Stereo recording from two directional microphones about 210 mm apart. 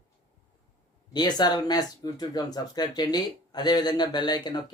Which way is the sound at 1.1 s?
20° left (ahead or behind).